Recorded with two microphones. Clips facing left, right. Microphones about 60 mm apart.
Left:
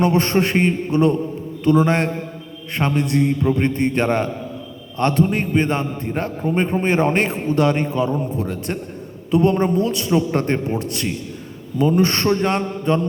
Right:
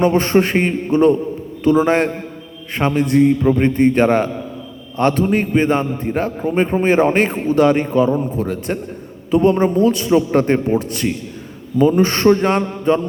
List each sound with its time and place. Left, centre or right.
0.0 s a man's voice: centre
11.8 s a man's voice: centre